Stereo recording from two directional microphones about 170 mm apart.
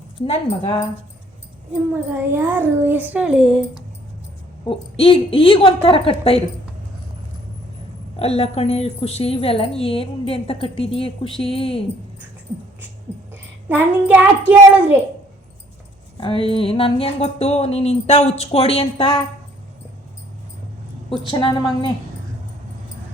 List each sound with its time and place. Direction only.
0.2 s a woman's voice: 30° left (ahead or behind)
1.9 s a child's voice: 10° right (ahead or behind)
4.7 s a woman's voice: 35° left (ahead or behind)
8.1 s a woman's voice: 35° left (ahead or behind)
13.3 s a child's voice: 10° right (ahead or behind)
16.1 s a woman's voice: 30° left (ahead or behind)
21.1 s a woman's voice: 30° left (ahead or behind)